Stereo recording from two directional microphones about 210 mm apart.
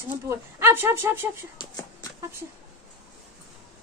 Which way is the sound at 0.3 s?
10° right (ahead or behind).